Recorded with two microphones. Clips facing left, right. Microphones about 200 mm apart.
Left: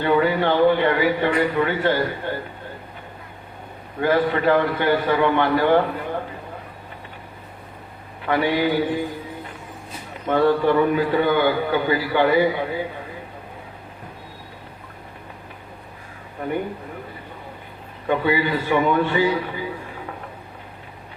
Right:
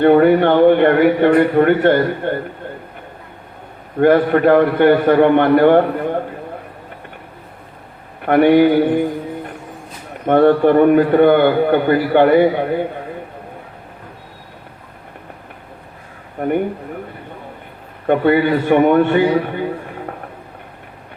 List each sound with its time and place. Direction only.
0.0 s a man's voice: 60° right (ahead or behind)
3.9 s a man's voice: 55° right (ahead or behind)
8.2 s a man's voice: 60° right (ahead or behind)
16.4 s a man's voice: 55° right (ahead or behind)
18.0 s a man's voice: 55° right (ahead or behind)